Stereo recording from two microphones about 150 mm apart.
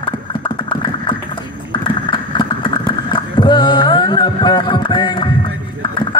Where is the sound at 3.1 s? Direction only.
30° left (ahead or behind).